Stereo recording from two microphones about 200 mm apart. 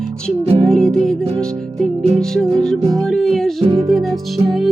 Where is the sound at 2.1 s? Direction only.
Centre (ahead or behind).